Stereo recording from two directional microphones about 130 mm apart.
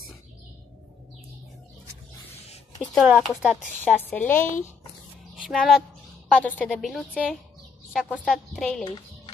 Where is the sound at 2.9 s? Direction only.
5° right (ahead or behind).